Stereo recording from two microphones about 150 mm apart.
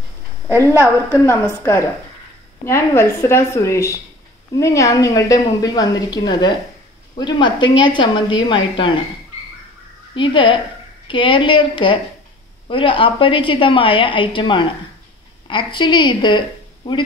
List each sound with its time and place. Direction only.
0.5 s a woman's voice: 20° right (ahead or behind)
1.2 s a woman's voice: 15° left (ahead or behind); by 8.9 s 35° left (ahead or behind)
10.1 s a woman's voice: 35° left (ahead or behind)